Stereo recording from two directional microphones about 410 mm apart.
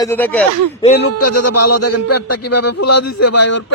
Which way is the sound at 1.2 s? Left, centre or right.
Left.